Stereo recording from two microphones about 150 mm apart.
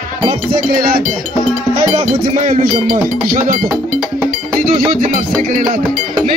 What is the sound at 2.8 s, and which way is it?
Speech, 65° right (ahead or behind).